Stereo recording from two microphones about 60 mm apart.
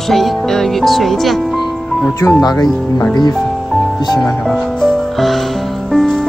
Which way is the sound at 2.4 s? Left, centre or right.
Left.